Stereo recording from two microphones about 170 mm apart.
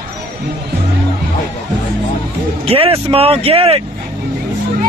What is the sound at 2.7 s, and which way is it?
Speech, 35° right (ahead or behind).